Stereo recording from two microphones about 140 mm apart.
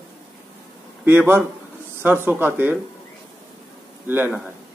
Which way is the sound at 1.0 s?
15° right (ahead or behind).